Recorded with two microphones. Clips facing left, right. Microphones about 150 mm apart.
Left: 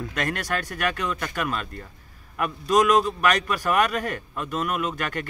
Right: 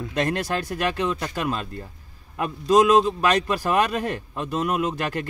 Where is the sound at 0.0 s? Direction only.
25° right (ahead or behind).